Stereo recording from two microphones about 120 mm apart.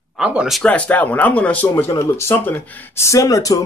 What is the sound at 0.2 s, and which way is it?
Speech, 10° right (ahead or behind).